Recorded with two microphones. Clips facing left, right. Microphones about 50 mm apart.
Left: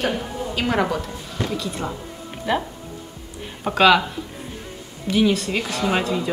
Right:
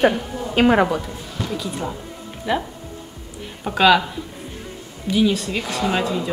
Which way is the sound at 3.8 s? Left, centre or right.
Centre.